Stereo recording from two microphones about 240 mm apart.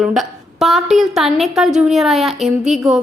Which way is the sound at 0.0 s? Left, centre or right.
Centre.